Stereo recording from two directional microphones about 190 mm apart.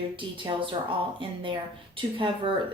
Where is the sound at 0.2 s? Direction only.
25° right (ahead or behind).